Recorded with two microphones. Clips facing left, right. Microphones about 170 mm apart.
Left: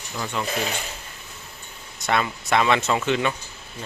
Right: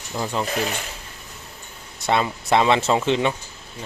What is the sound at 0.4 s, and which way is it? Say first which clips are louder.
Speech: right 1 dB; 30° right (ahead or behind).